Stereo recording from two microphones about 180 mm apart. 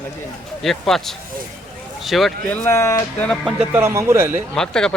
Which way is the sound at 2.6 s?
15° left (ahead or behind).